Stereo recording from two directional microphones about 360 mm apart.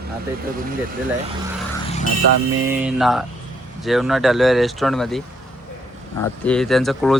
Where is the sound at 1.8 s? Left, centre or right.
Centre.